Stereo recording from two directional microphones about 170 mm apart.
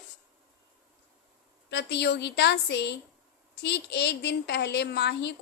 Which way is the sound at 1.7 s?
80° left.